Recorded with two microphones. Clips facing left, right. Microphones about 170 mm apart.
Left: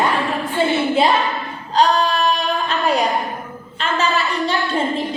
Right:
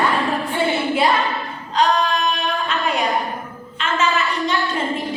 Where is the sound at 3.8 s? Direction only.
35° left (ahead or behind).